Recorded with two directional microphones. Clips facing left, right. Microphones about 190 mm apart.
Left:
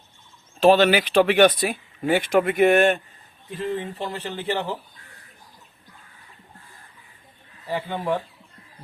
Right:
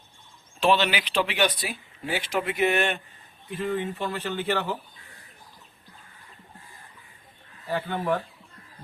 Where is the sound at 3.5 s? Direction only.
35° left (ahead or behind).